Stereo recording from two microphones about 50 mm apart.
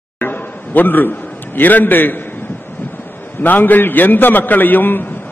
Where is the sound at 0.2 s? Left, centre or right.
Left.